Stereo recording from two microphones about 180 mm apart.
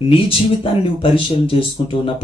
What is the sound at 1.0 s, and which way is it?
Speech, 30° left (ahead or behind).